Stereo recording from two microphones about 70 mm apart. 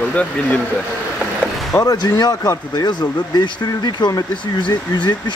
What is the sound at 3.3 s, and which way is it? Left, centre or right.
Speech, left.